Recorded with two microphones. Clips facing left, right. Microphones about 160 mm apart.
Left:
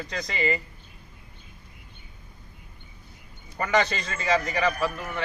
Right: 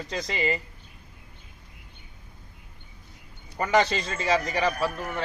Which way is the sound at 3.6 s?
25° right (ahead or behind).